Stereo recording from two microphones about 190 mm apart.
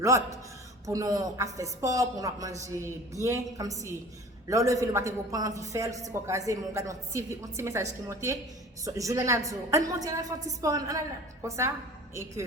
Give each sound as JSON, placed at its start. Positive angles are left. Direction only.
{"t": 0.0, "sound": "a woman's voice", "side_deg": -15}